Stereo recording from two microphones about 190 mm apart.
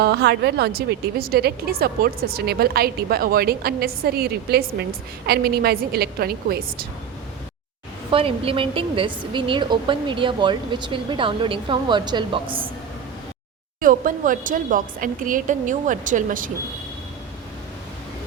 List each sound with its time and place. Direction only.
0.0 s a woman's voice: 60° right (ahead or behind)
8.1 s a woman's voice: 30° right (ahead or behind)
13.8 s speech: 45° right (ahead or behind)